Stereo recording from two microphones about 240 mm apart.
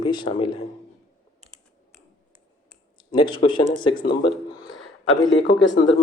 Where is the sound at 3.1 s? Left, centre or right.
Left.